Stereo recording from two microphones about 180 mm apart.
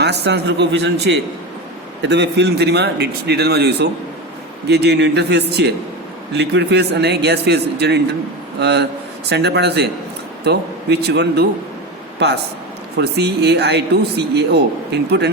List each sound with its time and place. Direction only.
0.0 s a man's voice: 65° right (ahead or behind)